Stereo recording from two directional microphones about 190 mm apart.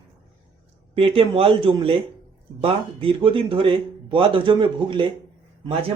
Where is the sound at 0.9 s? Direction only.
30° right (ahead or behind).